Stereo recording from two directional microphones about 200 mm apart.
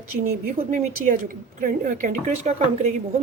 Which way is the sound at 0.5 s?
40° right (ahead or behind).